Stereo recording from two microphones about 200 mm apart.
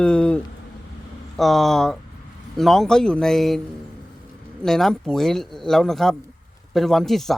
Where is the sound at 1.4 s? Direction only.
Centre (ahead or behind).